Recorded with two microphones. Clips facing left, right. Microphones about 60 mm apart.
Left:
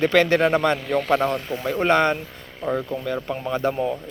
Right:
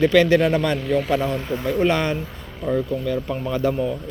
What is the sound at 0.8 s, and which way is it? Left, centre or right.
Speech, centre.